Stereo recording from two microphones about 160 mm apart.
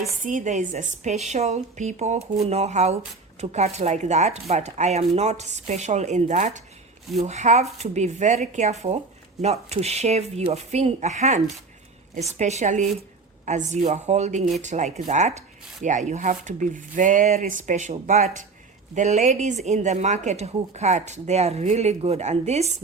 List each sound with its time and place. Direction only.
0.2 s speech: 50° right (ahead or behind)